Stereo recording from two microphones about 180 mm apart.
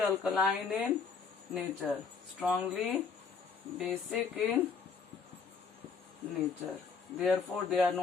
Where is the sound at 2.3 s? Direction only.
5° right (ahead or behind).